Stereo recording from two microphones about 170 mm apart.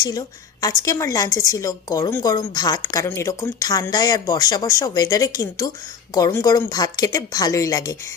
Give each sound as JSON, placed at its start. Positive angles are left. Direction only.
{"t": 0.0, "sound": "a woman's voice", "side_deg": 20}